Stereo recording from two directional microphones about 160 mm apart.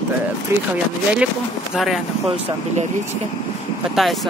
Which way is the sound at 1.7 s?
Centre (ahead or behind).